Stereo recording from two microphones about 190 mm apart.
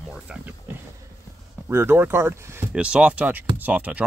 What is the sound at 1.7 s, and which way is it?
Speech, 10° right (ahead or behind).